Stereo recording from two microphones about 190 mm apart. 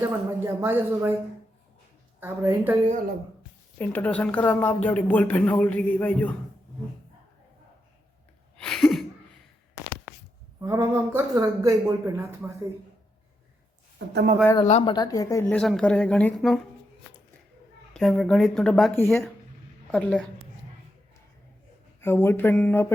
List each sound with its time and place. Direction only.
0.0 s speech: 15° right (ahead or behind)
2.2 s speech: 10° right (ahead or behind)
3.8 s a woman's voice: 10° left (ahead or behind)
8.6 s a sound: centre (ahead or behind)
10.6 s speech: 15° right (ahead or behind)
14.0 s speech: 70° right (ahead or behind)
14.4 s a woman's voice: 20° left (ahead or behind); by 16.6 s 5° left (ahead or behind)
17.9 s a woman's voice: centre (ahead or behind)
22.0 s a woman's voice: 10° left (ahead or behind)